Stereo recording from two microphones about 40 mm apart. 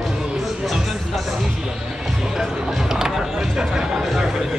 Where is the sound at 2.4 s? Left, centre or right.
Centre.